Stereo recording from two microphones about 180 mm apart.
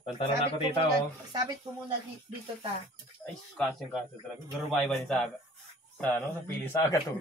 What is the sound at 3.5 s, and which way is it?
A man's voice, centre (ahead or behind).